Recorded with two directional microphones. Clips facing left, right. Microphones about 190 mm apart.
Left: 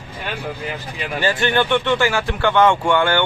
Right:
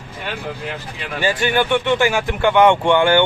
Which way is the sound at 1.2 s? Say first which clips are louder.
Right 1 dB; 15° right (ahead or behind).